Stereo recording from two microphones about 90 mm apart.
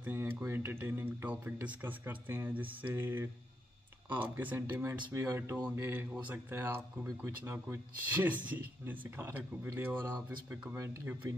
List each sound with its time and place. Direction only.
0.0 s speech: 20° right (ahead or behind)
4.6 s speech: 30° right (ahead or behind)